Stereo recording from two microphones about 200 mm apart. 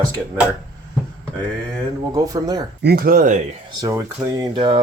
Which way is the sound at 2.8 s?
50° right (ahead or behind).